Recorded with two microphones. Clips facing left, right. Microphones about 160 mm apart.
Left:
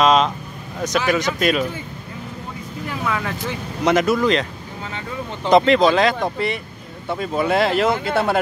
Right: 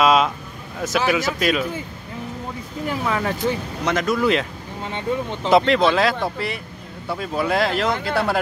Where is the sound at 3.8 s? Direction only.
10° left (ahead or behind).